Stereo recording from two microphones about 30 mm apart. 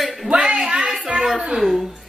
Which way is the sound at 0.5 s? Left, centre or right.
Right.